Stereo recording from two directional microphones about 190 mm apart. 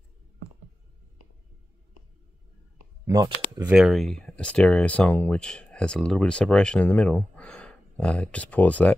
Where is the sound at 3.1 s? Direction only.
20° right (ahead or behind).